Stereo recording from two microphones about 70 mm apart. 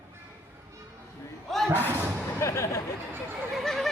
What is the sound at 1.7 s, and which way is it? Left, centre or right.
Speech, left.